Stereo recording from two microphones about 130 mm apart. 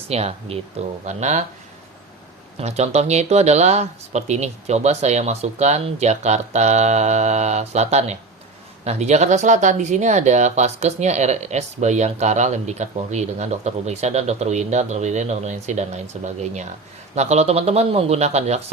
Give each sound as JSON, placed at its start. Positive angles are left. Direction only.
{"t": 0.1, "sound": "speech", "side_deg": -55}
{"t": 1.0, "sound": "speech", "side_deg": -65}
{"t": 2.6, "sound": "speech", "side_deg": -55}
{"t": 17.2, "sound": "speech", "side_deg": -55}